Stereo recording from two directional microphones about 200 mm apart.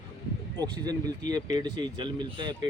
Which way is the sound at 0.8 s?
20° right (ahead or behind).